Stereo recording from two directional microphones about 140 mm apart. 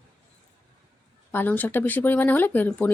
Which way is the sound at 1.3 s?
15° left (ahead or behind).